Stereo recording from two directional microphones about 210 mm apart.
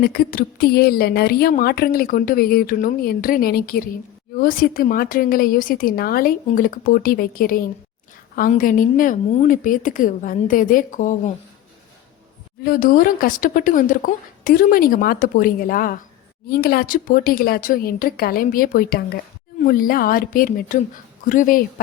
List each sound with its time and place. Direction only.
0.0 s speech: 45° left (ahead or behind)
12.6 s speech: 45° left (ahead or behind)